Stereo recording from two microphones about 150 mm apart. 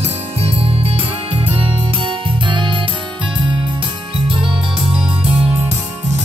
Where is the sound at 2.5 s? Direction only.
35° right (ahead or behind).